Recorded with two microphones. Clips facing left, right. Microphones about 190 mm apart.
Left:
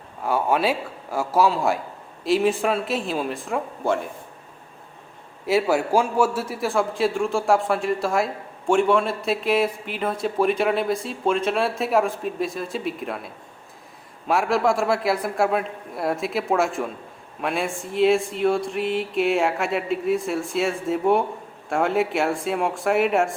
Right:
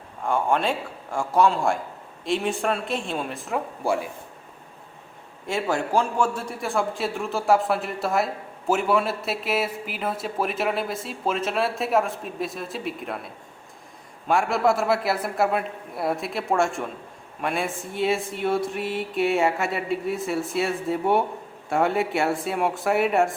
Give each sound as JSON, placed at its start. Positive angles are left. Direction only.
{"t": 0.2, "sound": "a man's voice", "side_deg": 5}
{"t": 5.5, "sound": "a man's voice", "side_deg": 5}